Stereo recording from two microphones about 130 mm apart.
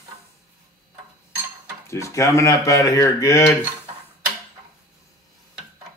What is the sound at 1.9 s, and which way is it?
Speech, 25° left (ahead or behind).